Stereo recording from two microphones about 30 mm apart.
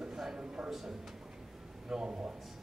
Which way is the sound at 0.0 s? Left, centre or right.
Right.